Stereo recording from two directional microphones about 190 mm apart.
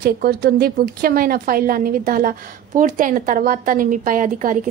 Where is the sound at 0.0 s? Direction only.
55° right (ahead or behind).